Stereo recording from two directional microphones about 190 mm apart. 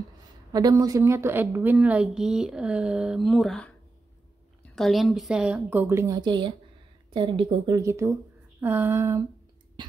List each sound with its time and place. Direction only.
0.5 s a woman's voice: 20° right (ahead or behind); by 3.7 s 5° left (ahead or behind)
4.7 s a woman's voice: centre (ahead or behind)